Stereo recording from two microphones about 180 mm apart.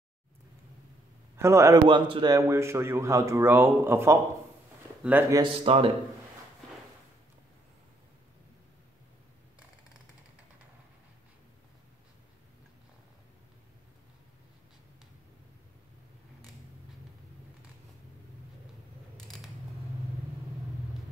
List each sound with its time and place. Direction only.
1.3 s a man's voice: 15° right (ahead or behind)
5.3 s speech: 30° right (ahead or behind)
19.1 s scissors: centre (ahead or behind)